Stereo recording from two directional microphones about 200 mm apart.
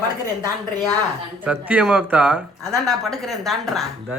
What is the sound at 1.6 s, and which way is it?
Speech, 5° right (ahead or behind).